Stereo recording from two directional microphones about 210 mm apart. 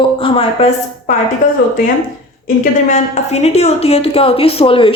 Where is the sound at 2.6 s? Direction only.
35° left (ahead or behind).